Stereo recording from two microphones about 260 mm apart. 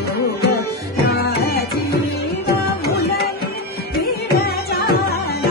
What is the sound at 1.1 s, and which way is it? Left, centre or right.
Music, left.